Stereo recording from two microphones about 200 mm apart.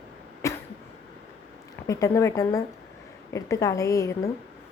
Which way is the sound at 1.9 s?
15° left (ahead or behind).